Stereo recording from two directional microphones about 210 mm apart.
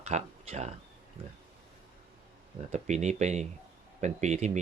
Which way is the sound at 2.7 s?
35° right (ahead or behind).